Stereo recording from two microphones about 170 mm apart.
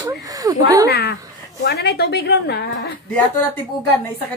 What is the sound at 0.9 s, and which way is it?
A woman's voice, 75° left (ahead or behind).